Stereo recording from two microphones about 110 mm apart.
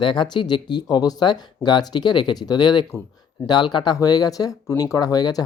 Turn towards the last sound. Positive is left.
turn(degrees=35)  # may be behind; listen again after turning